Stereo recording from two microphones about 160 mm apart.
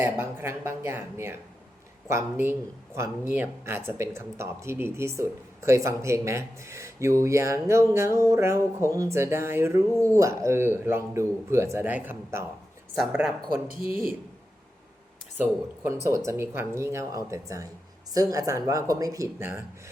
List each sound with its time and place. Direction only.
0.0 s speech: 15° right (ahead or behind)
15.9 s speech: 20° right (ahead or behind)